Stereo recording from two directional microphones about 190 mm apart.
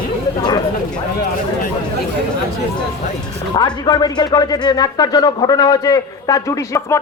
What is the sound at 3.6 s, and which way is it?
Speech, 20° left (ahead or behind).